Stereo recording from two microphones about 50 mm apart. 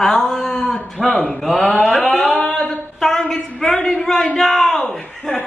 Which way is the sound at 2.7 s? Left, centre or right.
Centre.